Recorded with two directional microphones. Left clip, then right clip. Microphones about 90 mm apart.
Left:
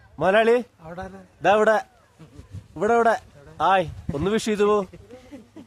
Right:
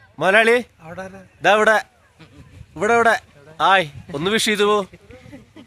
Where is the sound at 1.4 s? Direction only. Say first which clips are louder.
Right 3 dB; 35° right (ahead or behind).